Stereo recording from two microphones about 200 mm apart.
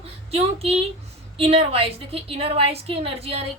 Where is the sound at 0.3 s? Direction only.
30° right (ahead or behind).